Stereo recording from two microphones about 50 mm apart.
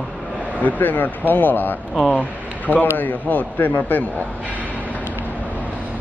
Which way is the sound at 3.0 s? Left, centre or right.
Left.